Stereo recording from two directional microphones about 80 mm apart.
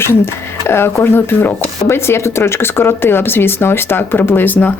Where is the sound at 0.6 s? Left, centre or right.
Left.